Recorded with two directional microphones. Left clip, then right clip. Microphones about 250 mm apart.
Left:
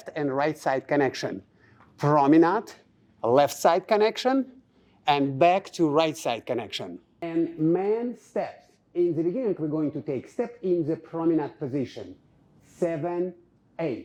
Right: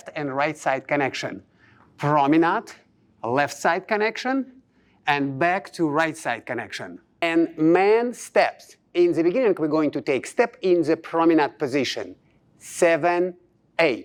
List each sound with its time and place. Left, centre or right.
0.0 s speech: right
3.2 s speech: right
7.2 s speech: centre